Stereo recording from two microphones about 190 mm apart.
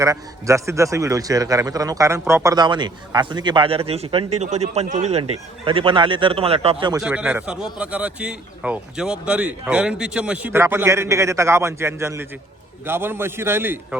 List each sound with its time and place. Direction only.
0.0 s a man's voice: 15° right (ahead or behind); by 5.2 s 35° right (ahead or behind)
5.6 s a man's voice: 25° right (ahead or behind)
7.0 s a man's voice: 5° right (ahead or behind)